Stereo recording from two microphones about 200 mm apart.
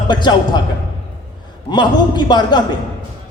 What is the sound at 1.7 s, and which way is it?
Speech, 20° left (ahead or behind).